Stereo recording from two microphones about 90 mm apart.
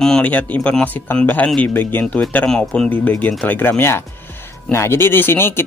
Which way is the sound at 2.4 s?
5° left (ahead or behind).